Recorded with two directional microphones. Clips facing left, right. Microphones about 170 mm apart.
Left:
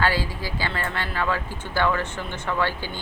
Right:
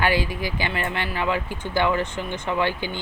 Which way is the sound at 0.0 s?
15° right (ahead or behind).